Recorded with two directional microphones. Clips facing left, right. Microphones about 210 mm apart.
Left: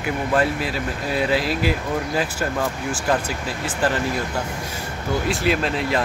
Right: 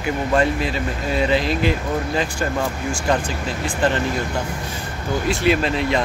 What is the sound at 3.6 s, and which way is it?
Speech, 5° left (ahead or behind).